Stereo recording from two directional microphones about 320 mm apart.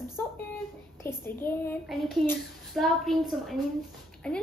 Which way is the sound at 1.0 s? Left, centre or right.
Centre.